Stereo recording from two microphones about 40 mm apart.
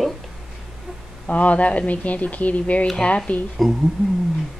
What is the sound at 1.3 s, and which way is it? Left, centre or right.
Speech, left.